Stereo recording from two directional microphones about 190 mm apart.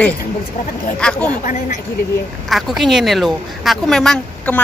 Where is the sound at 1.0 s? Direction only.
5° left (ahead or behind).